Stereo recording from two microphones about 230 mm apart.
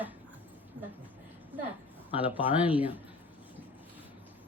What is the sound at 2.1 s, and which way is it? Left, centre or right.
Speech, centre.